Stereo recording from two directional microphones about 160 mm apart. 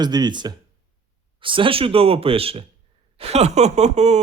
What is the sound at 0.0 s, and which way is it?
Speech, 25° right (ahead or behind).